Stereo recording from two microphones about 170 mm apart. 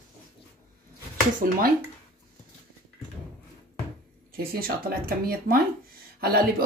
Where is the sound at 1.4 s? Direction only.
50° right (ahead or behind).